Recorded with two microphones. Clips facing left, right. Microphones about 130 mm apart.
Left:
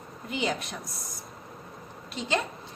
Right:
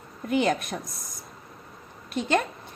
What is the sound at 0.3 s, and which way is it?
Speech, 55° right (ahead or behind).